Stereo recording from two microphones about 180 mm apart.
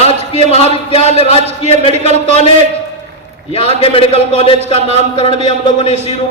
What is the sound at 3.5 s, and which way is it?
A man's voice, 35° left (ahead or behind).